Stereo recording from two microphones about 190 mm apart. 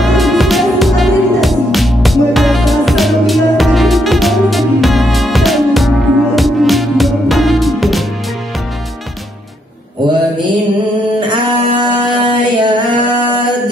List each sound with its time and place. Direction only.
0.0 s music: centre (ahead or behind)
11.1 s mantra: 25° right (ahead or behind)